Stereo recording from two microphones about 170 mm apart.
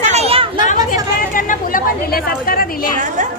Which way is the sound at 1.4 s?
55° left (ahead or behind).